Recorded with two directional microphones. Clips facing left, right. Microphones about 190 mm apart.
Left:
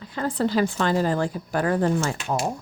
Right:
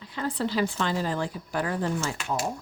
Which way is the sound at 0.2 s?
45° left (ahead or behind).